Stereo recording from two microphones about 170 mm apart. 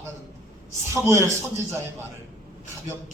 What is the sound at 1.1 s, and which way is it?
Speech, 15° right (ahead or behind).